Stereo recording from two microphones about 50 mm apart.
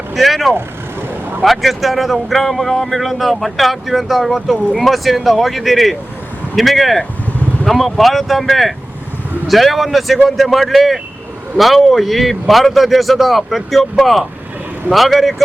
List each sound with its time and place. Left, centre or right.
0.1 s speech: centre
0.5 s vehicle: right
1.4 s speech: centre